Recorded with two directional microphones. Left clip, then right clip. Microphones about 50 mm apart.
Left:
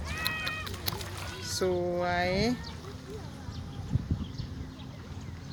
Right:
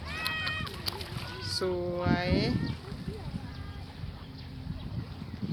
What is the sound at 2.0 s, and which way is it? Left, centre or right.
Speech, left.